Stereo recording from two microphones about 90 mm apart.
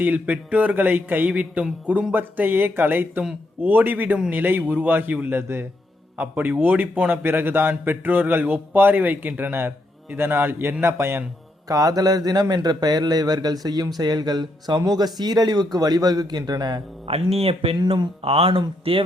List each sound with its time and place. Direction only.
0.0 s a man's voice: 20° right (ahead or behind)
11.7 s speech: 45° right (ahead or behind)
17.1 s speech: 90° right
17.8 s speech: 70° right (ahead or behind); by 19.0 s 90° right